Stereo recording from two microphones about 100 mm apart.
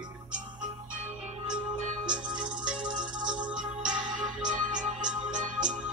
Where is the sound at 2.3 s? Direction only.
10° right (ahead or behind).